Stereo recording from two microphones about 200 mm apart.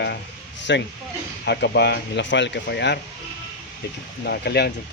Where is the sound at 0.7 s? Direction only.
60° left (ahead or behind).